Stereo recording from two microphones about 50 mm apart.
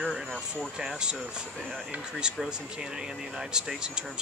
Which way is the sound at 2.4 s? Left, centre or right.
Centre.